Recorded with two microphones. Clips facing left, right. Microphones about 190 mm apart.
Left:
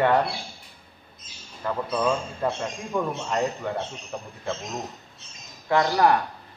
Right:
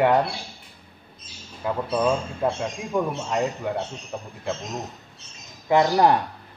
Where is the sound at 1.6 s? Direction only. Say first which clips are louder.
Right 2 dB; 15° right (ahead or behind).